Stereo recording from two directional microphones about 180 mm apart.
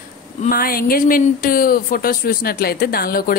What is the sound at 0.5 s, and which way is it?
A woman's voice, 55° left (ahead or behind).